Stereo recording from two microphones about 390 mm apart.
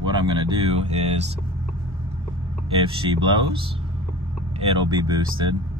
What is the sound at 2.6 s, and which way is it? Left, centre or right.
Speech, centre.